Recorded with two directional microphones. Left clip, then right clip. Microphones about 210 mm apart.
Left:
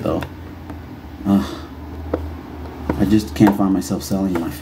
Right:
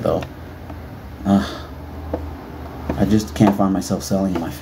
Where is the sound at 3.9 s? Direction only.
20° right (ahead or behind).